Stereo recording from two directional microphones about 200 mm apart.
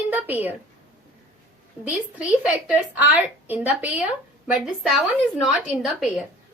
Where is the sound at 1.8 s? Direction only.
5° right (ahead or behind).